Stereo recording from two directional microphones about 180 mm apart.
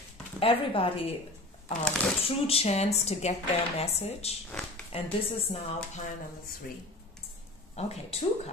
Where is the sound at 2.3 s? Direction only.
35° left (ahead or behind).